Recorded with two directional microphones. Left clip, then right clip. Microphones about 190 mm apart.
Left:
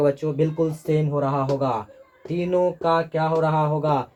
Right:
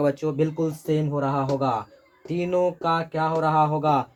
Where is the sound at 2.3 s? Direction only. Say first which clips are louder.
Left 1 dB; 35° right (ahead or behind).